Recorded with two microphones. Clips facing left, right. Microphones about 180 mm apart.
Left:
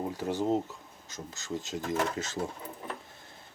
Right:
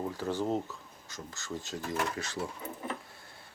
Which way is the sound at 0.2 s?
15° left (ahead or behind).